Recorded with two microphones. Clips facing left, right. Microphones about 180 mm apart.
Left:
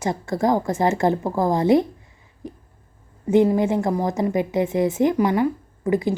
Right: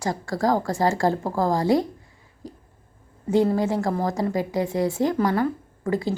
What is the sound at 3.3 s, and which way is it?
A woman's voice, 20° left (ahead or behind).